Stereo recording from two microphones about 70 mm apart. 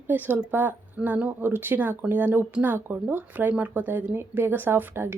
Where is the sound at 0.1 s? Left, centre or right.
Right.